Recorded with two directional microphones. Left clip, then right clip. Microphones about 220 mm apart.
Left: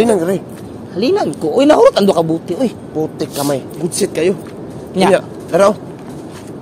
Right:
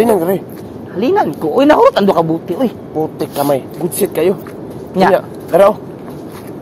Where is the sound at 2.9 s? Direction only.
15° left (ahead or behind).